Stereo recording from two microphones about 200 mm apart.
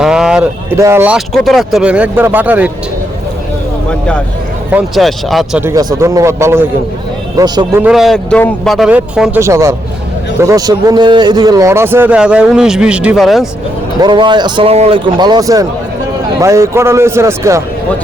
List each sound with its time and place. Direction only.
0.0 s a sound: 5° right (ahead or behind)
0.8 s a man's voice: 10° right (ahead or behind)
4.7 s a man's voice: centre (ahead or behind); by 7.9 s 20° right (ahead or behind)
7.9 s a man's voice: centre (ahead or behind)
14.0 s a man's voice: 25° right (ahead or behind)